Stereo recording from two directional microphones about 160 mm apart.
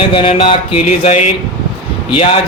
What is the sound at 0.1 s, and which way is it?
Speech, 35° left (ahead or behind).